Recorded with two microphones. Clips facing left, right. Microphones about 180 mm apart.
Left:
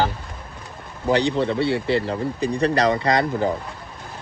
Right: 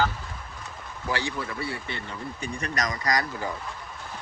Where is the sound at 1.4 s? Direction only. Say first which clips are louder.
Left 12 dB; 70° left (ahead or behind); by 2.1 s 90° left.